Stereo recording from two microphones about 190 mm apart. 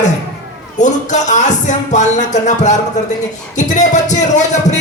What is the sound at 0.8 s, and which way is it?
Music, 40° left (ahead or behind).